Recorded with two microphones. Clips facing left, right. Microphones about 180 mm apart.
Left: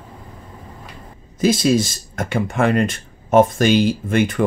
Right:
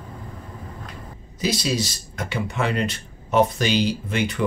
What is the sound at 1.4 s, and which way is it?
Speech, 50° left (ahead or behind).